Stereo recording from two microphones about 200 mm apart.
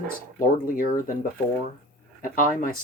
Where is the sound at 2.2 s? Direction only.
45° left (ahead or behind).